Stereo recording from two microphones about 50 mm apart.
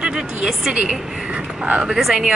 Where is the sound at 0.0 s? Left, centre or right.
Centre.